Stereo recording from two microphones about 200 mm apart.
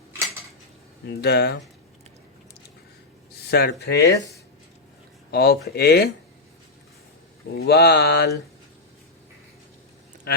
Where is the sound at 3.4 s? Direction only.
55° left (ahead or behind).